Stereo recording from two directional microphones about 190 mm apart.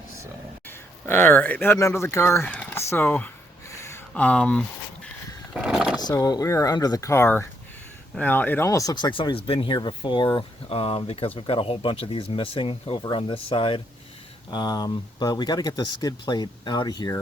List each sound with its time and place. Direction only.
0.7 s speech: 10° left (ahead or behind)
5.5 s vehicle: 5° right (ahead or behind)
6.0 s speech: 20° left (ahead or behind)